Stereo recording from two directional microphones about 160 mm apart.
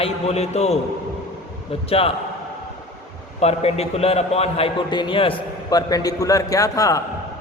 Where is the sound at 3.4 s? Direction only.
40° left (ahead or behind); by 7.0 s 20° left (ahead or behind).